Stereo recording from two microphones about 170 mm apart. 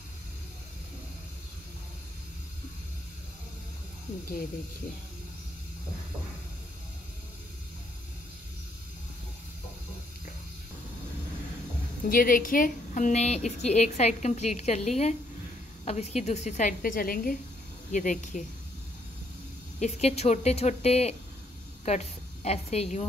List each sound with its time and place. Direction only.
12.1 s a woman's voice: 55° left (ahead or behind)
19.8 s a woman's voice: 40° left (ahead or behind)